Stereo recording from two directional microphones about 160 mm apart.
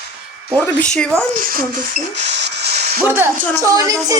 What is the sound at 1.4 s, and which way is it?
Speech, 65° right (ahead or behind).